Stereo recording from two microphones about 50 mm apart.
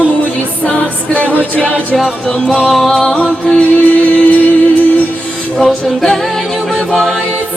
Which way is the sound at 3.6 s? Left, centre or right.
Left.